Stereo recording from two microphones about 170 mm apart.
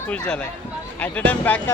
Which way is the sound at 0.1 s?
5° left (ahead or behind).